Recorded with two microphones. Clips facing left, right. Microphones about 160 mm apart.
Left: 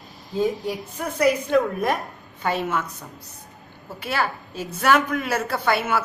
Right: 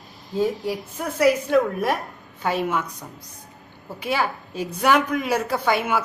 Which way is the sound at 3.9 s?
10° right (ahead or behind).